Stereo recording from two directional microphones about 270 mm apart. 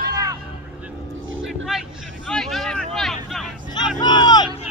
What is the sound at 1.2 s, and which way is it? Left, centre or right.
Vehicle, right.